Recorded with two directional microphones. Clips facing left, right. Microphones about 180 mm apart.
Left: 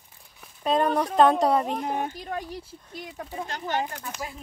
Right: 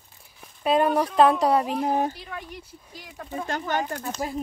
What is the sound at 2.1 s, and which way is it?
Speech, 40° left (ahead or behind).